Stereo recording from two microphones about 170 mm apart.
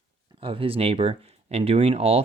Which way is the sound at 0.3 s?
30° right (ahead or behind).